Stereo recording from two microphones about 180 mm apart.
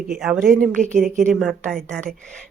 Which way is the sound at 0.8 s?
40° right (ahead or behind).